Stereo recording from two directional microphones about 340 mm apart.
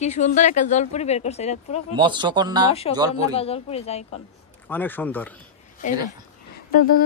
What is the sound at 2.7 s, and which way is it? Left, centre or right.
Speech, centre.